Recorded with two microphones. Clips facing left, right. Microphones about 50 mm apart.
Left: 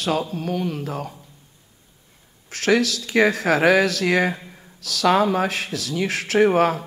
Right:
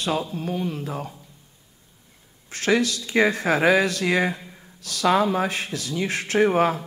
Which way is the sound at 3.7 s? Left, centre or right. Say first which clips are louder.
Left 2 dB; left.